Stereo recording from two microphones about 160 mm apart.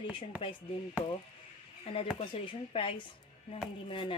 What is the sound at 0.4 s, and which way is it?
Speech, 30° left (ahead or behind).